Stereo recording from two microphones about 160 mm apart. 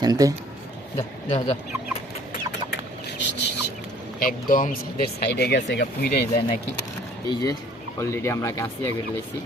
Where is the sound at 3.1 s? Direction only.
90° left.